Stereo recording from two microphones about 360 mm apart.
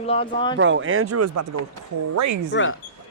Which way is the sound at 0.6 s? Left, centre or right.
Right.